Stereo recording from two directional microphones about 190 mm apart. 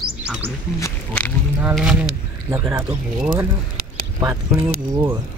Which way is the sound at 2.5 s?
15° right (ahead or behind).